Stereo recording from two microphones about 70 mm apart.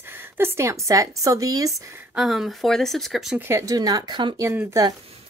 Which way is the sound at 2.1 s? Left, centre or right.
Centre.